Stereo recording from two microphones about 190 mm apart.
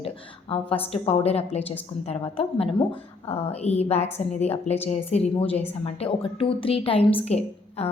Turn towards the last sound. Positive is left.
turn(degrees=35)  # may be behind; listen again after turning